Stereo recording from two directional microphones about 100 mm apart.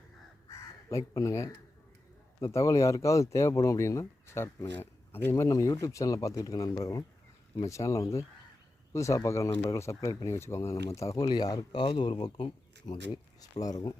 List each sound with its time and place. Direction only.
0.4 s crow: 35° left (ahead or behind)
2.4 s speech: 30° left (ahead or behind)